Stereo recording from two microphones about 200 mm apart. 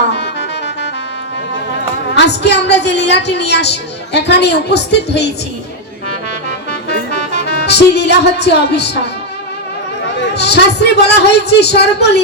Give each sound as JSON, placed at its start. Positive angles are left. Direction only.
{"t": 0.1, "sound": "music", "side_deg": 60}
{"t": 2.1, "sound": "a woman's voice", "side_deg": 60}
{"t": 6.8, "sound": "music", "side_deg": 55}
{"t": 10.2, "sound": "a woman's voice", "side_deg": 55}